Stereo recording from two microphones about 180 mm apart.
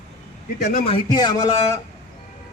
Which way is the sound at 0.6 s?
50° left (ahead or behind).